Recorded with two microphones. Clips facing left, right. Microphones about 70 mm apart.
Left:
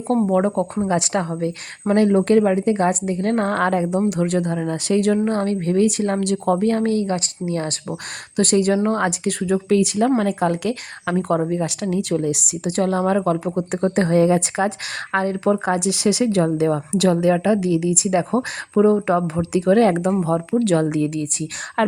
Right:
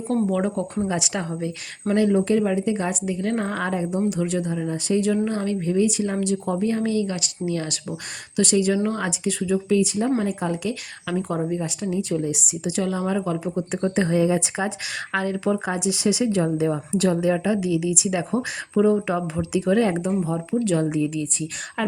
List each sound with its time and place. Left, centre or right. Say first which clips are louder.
0.2 s speech: left 5 dB; left
0.9 s a woman's voice: left 5 dB; left
2.1 s speech: left 5 dB; left
4.2 s speech: left 4 dB; left
5.1 s a woman's voice: left 4 dB; left
8.4 s a woman's voice: left 3 dB; left
12.7 s speech: left 6 dB; left
15.1 s speech: left 4 dB; left
18.8 s speech: left 4 dB; left